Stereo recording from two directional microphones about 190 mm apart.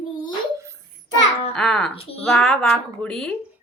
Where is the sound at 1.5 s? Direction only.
5° left (ahead or behind).